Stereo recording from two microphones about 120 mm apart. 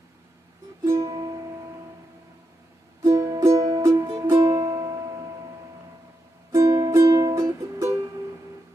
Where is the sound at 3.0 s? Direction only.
25° right (ahead or behind).